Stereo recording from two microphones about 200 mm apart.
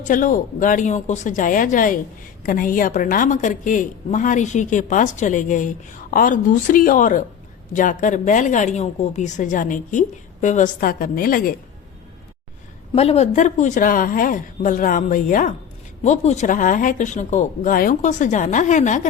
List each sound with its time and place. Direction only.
0.0 s a woman's voice: 40° left (ahead or behind)
12.9 s a woman's voice: 30° left (ahead or behind)